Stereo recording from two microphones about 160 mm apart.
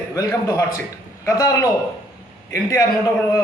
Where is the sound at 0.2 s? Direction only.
20° left (ahead or behind).